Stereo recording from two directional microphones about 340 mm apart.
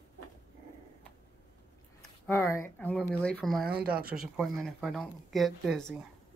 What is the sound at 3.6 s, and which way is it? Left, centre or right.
Speech, right.